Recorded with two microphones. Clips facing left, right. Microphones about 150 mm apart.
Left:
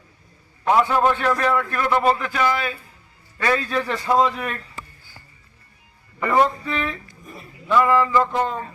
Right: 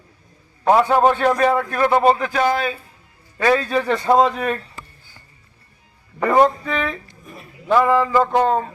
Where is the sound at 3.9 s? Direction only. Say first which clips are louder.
Right 4 dB; 40° right (ahead or behind).